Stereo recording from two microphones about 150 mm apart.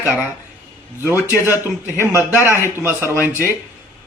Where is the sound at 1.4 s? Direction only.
15° right (ahead or behind).